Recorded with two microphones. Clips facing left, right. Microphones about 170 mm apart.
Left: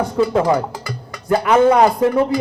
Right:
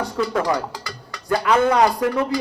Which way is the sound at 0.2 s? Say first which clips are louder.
Left 6 dB; 25° left (ahead or behind).